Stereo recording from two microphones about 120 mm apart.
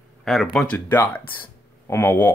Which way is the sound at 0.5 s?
10° left (ahead or behind).